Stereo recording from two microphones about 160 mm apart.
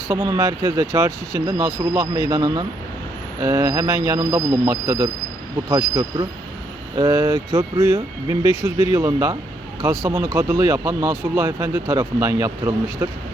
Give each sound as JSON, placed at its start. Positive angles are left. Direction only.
{"t": 0.1, "sound": "speech", "side_deg": -20}